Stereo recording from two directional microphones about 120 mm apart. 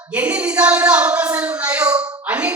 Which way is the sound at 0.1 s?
10° right (ahead or behind).